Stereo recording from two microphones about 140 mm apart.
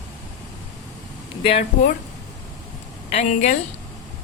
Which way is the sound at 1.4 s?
45° left (ahead or behind).